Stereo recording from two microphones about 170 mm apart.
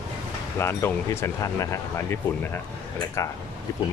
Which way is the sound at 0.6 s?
15° left (ahead or behind).